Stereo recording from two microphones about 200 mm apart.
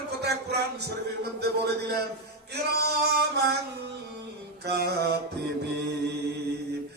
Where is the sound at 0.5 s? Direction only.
55° right (ahead or behind).